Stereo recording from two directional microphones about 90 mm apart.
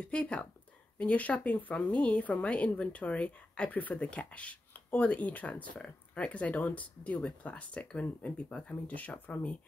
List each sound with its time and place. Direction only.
0.0 s speech: 10° left (ahead or behind)